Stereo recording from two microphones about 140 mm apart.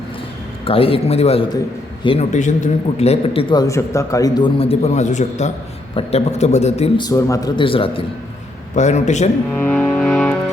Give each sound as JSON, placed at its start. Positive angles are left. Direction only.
{"t": 0.6, "sound": "a man's voice", "side_deg": 45}
{"t": 2.3, "sound": "a man's voice", "side_deg": 60}
{"t": 3.5, "sound": "a man's voice", "side_deg": 25}
{"t": 6.0, "sound": "a man's voice", "side_deg": 45}
{"t": 6.9, "sound": "a man's voice", "side_deg": 25}
{"t": 7.6, "sound": "a man's voice", "side_deg": 40}
{"t": 8.7, "sound": "a man's voice", "side_deg": 55}
{"t": 9.6, "sound": "music", "side_deg": 10}